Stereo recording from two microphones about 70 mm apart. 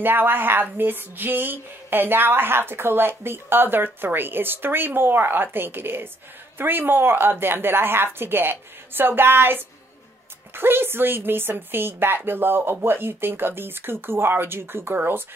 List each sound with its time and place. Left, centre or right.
0.0 s speech: right